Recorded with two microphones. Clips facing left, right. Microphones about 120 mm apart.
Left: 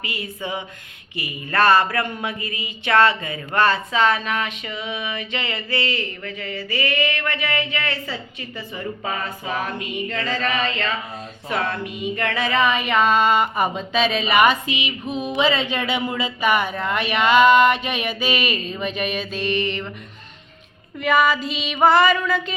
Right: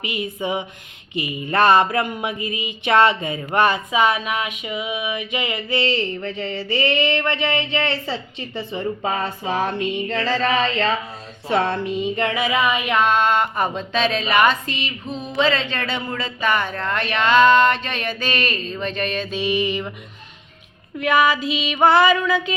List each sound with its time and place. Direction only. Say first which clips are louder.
0.0 s speech: right 4 dB; 20° right (ahead or behind)
11.4 s female singing: right 5 dB; 30° right (ahead or behind); by 15.3 s 10° left (ahead or behind)
15.4 s speech: right 1 dB; 10° left (ahead or behind); by 19.9 s 10° right (ahead or behind)
21.0 s female singing: right 1 dB; centre (ahead or behind)